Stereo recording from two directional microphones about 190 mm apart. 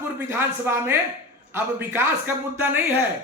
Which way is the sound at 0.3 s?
10° right (ahead or behind).